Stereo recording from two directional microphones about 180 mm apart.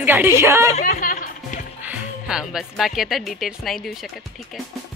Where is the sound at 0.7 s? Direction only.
45° left (ahead or behind).